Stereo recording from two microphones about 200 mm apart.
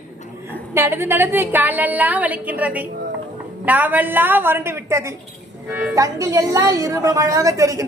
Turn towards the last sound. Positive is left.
turn(degrees=-15)  # may be behind; listen again after turning